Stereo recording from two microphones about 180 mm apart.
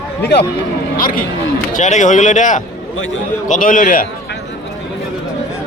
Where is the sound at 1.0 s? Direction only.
50° left (ahead or behind).